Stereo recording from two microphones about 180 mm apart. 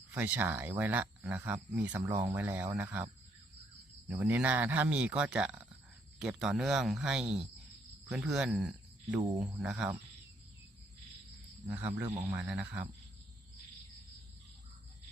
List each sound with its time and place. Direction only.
0.1 s speech: 10° right (ahead or behind)
4.1 s speech: 10° right (ahead or behind)
12.1 s speech: 15° right (ahead or behind)